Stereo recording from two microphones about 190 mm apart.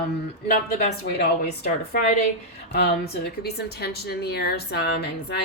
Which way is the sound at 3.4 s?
60° left (ahead or behind).